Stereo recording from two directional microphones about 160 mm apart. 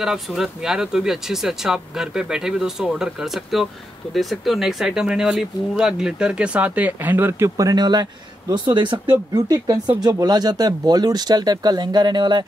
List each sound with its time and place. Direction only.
0.0 s speech: centre (ahead or behind); by 12.4 s 30° right (ahead or behind)